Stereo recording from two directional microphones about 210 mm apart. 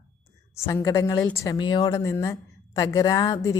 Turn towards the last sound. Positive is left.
turn(degrees=20)  # may be behind; listen again after turning